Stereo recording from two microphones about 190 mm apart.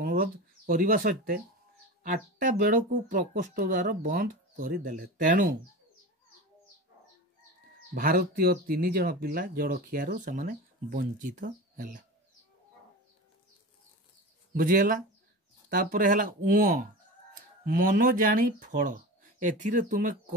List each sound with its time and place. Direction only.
0.0 s speech: 50° right (ahead or behind)
7.9 s speech: 50° right (ahead or behind)
14.5 s speech: 45° right (ahead or behind)